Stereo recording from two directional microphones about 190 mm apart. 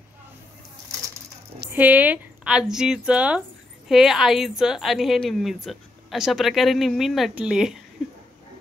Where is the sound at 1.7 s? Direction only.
10° right (ahead or behind).